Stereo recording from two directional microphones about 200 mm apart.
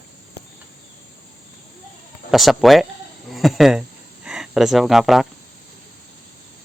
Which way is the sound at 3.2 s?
Centre (ahead or behind).